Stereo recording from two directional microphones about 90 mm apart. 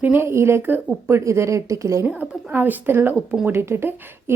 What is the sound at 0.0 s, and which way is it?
A woman's voice, 25° right (ahead or behind).